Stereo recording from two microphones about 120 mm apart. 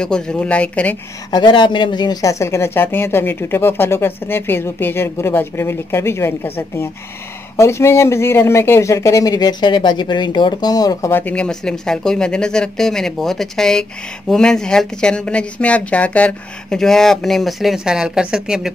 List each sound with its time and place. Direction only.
0.0 s speech: 5° left (ahead or behind)
1.3 s speech: 40° left (ahead or behind)
11.1 s speech: 15° left (ahead or behind); by 18.7 s 5° right (ahead or behind)